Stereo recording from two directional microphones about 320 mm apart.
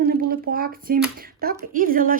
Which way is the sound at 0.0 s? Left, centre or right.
Right.